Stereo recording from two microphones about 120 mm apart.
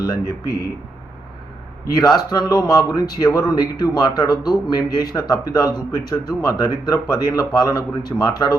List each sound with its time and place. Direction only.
0.0 s speech: 35° left (ahead or behind)
2.0 s speech: 35° left (ahead or behind)